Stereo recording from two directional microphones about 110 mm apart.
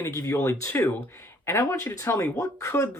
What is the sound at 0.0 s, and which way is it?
Speech, 30° left (ahead or behind).